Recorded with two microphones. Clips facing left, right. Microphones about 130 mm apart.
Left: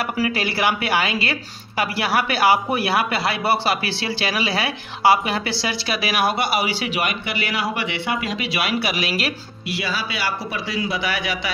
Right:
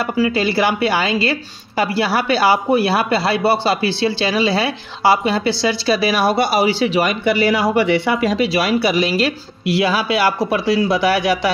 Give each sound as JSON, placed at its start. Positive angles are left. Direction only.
{"t": 0.0, "sound": "speech", "side_deg": -25}
{"t": 9.8, "sound": "speech", "side_deg": -50}